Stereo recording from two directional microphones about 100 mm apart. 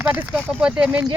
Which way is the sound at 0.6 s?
10° right (ahead or behind).